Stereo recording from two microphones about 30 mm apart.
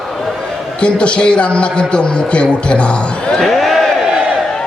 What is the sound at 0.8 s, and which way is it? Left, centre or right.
A man's voice, left.